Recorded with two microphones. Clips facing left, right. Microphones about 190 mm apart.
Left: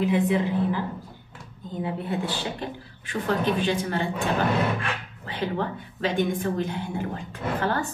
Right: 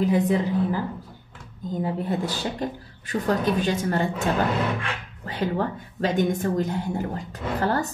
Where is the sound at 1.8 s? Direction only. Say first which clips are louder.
Right 2 dB; 40° right (ahead or behind).